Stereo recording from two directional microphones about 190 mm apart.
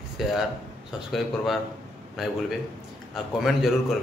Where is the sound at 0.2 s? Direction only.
Centre (ahead or behind).